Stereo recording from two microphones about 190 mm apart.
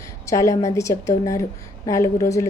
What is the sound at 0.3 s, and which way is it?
A woman's voice, 15° left (ahead or behind).